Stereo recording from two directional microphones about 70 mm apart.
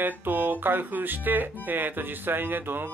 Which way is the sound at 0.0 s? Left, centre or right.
Right.